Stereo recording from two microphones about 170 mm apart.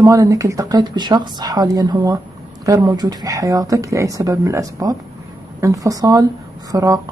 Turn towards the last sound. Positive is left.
turn(degrees=-20)  # may be behind; listen again after turning